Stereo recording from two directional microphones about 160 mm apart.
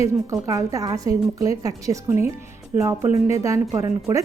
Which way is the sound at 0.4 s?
20° right (ahead or behind).